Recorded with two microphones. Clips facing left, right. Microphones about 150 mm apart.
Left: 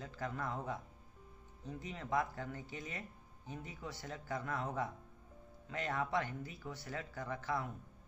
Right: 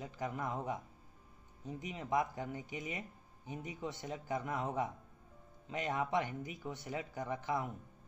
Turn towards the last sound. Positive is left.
turn(degrees=-20)  # may be behind; listen again after turning